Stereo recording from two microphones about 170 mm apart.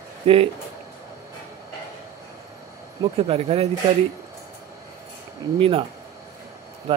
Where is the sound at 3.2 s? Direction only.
35° right (ahead or behind).